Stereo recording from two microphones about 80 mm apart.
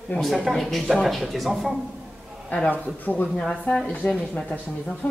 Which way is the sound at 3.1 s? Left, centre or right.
Left.